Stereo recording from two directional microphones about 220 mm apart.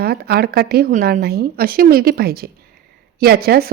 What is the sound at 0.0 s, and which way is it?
Speech, 45° right (ahead or behind).